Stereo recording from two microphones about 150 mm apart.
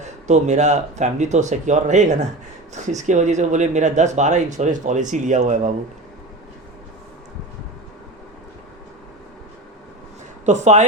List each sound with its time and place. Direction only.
0.0 s speech: 50° right (ahead or behind)
10.4 s speech: 50° right (ahead or behind)